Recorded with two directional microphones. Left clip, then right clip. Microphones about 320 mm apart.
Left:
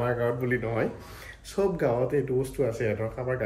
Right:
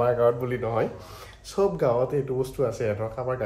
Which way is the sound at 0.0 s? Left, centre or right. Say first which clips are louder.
Right 6 dB; centre.